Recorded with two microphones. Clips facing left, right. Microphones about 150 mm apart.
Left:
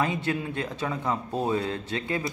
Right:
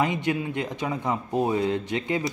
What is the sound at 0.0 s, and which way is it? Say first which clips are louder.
Speech: right 2 dB; 15° right (ahead or behind).